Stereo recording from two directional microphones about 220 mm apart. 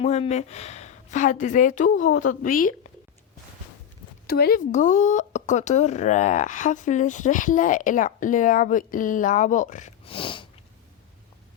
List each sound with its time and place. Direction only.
0.0 s speech: 30° left (ahead or behind)
4.3 s speech: 45° left (ahead or behind); by 10.4 s 25° left (ahead or behind)